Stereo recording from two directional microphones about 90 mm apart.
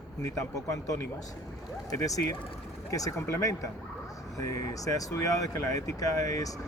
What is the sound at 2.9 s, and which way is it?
Speech, 35° left (ahead or behind).